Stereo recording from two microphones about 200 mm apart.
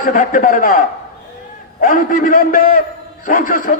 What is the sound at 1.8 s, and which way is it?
A man's voice, 45° left (ahead or behind).